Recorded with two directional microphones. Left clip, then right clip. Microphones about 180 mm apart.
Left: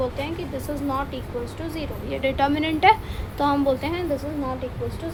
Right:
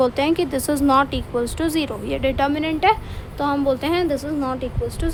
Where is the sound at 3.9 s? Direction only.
45° right (ahead or behind).